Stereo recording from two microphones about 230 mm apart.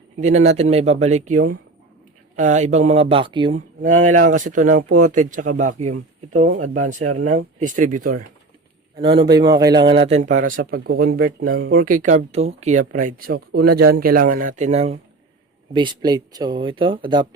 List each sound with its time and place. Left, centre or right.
0.2 s speech: right
3.8 s a man's voice: right
7.0 s speech: right
7.3 s a man's voice: right
9.0 s a man's voice: centre